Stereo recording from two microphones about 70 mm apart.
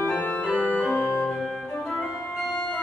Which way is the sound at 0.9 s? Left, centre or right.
Left.